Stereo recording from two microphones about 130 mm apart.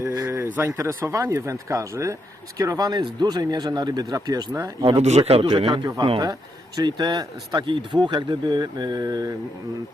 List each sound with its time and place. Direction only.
0.0 s speech: 25° right (ahead or behind)
4.9 s a man's voice: 55° right (ahead or behind); by 9.3 s 30° right (ahead or behind)